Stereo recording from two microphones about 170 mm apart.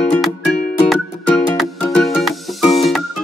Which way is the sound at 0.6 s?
65° left (ahead or behind).